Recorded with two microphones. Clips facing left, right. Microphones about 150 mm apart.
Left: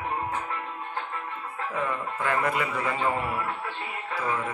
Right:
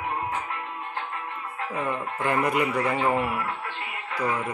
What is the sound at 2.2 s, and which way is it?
Speech, 20° right (ahead or behind).